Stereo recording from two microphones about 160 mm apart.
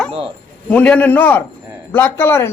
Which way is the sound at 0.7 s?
10° left (ahead or behind).